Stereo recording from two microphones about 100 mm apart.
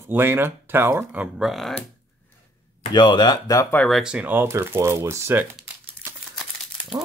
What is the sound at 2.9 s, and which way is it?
Speech, 50° left (ahead or behind).